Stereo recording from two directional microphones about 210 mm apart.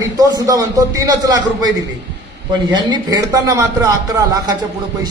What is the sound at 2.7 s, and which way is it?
A man's voice, 20° right (ahead or behind).